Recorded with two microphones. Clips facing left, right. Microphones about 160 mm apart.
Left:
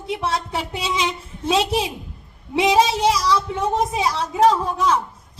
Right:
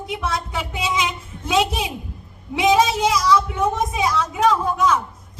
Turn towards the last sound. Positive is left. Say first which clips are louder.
# right 1 dB
turn(degrees=35)  # may be behind; listen again after turning